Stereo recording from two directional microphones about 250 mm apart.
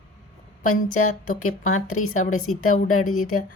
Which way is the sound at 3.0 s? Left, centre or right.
Left.